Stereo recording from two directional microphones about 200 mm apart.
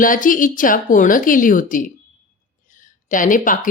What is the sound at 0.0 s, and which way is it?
Speech, 45° left (ahead or behind).